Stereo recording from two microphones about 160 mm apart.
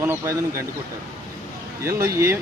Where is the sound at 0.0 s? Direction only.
15° right (ahead or behind).